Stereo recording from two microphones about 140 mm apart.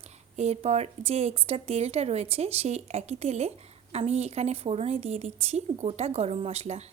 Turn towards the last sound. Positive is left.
turn(degrees=-50)  # may be behind; listen again after turning